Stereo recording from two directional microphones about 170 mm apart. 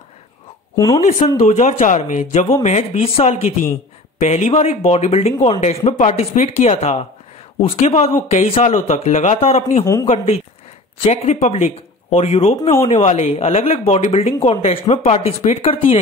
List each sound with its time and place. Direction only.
0.7 s speech: 20° left (ahead or behind)
1.4 s speech: 45° left (ahead or behind)